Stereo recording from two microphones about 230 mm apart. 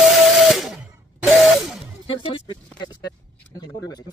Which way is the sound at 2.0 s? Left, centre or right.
Left.